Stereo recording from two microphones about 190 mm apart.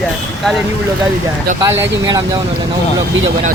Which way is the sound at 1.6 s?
15° right (ahead or behind).